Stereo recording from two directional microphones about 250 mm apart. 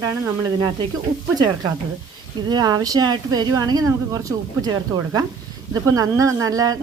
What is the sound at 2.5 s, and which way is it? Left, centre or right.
A woman's voice, centre.